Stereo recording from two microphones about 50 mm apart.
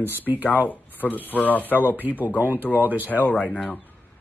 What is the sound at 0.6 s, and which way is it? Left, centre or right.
Speech, left.